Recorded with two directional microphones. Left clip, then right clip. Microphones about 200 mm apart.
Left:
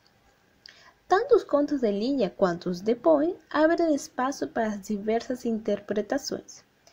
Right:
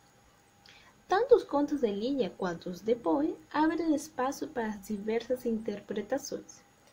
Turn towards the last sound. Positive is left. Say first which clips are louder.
# left 4 dB
turn(degrees=25)  # may be behind; listen again after turning